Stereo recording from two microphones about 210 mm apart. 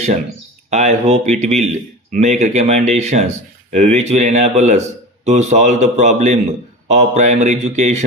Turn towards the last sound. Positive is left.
turn(degrees=-35)  # may be behind; listen again after turning